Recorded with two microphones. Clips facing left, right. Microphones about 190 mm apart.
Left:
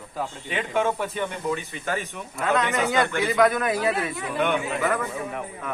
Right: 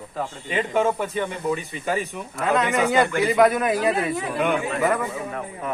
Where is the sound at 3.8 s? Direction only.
40° right (ahead or behind).